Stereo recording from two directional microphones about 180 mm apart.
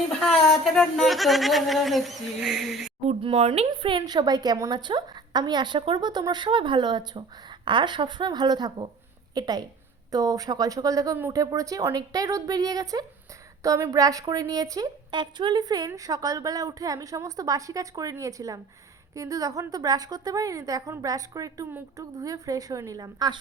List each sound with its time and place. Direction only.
0.3 s speech: centre (ahead or behind)
3.1 s speech: 30° right (ahead or behind)